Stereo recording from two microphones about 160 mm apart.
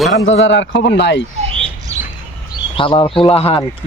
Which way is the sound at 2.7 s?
30° left (ahead or behind).